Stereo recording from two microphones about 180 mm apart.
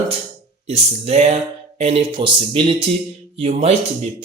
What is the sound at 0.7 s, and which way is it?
Speech, 35° right (ahead or behind).